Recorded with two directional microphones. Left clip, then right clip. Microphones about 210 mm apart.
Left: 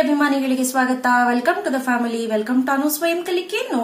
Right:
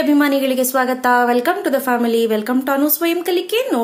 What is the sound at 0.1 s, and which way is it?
Speech, 40° right (ahead or behind).